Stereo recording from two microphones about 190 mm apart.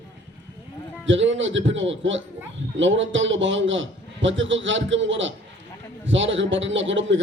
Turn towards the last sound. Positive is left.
turn(degrees=-80)